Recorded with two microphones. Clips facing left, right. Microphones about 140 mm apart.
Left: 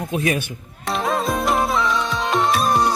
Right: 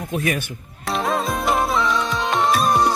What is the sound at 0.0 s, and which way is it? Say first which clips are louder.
Speech: left 2 dB; 20° left (ahead or behind).